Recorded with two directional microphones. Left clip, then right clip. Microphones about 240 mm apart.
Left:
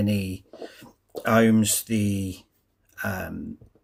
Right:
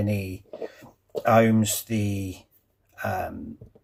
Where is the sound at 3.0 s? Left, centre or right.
Left.